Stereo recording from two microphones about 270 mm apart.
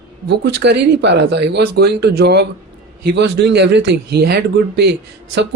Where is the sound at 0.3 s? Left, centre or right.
Right.